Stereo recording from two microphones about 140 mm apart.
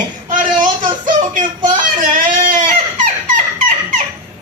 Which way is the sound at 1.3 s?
70° right (ahead or behind).